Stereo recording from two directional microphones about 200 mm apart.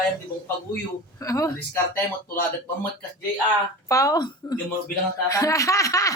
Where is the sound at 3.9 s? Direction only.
15° left (ahead or behind).